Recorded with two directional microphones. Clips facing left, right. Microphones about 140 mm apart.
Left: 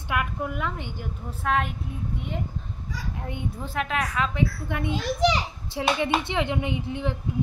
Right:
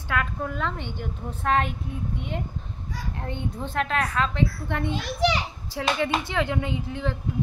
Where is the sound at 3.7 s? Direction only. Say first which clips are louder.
Right 2 dB; 5° left (ahead or behind).